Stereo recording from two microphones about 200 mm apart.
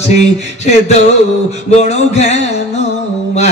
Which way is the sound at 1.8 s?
35° left (ahead or behind).